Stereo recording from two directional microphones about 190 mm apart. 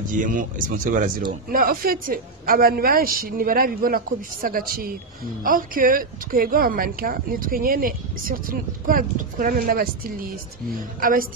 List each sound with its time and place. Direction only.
0.1 s speech: 45° right (ahead or behind)